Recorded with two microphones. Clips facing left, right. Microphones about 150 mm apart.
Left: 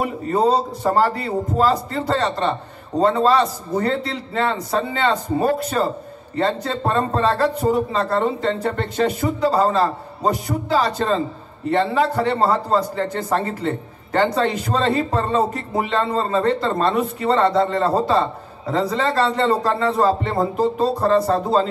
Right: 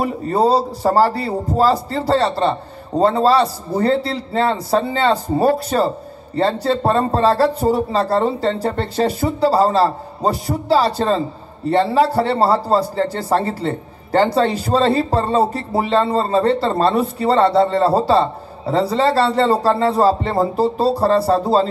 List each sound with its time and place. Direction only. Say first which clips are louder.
0.0 s a man's voice: right 2 dB; 35° right (ahead or behind)